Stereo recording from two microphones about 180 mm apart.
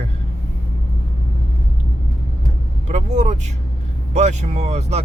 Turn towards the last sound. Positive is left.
turn(degrees=-40)  # may be behind; listen again after turning